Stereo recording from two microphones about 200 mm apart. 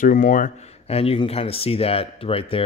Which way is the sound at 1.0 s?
30° left (ahead or behind).